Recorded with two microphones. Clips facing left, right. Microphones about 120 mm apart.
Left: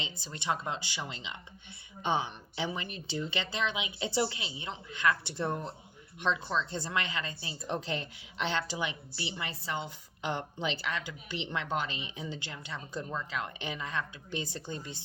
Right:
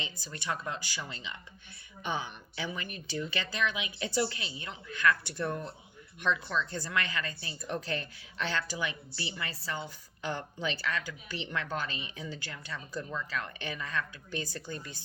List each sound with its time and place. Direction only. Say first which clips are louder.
0.0 s speech: left 2 dB; 25° left (ahead or behind)